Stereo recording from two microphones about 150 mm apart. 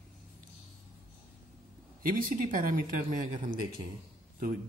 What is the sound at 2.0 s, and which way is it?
Speech, 65° right (ahead or behind).